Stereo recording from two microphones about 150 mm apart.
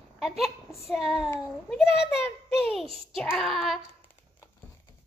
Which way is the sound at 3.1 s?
5° left (ahead or behind).